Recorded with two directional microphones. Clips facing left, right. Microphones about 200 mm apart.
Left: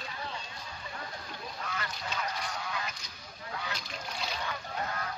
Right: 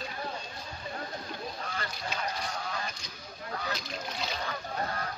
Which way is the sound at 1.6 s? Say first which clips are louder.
Right 1 dB; 35° right (ahead or behind).